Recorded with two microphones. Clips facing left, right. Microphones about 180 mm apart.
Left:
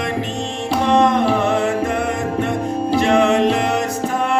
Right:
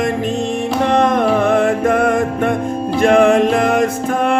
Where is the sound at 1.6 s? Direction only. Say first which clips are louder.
Right 5 dB; 50° right (ahead or behind).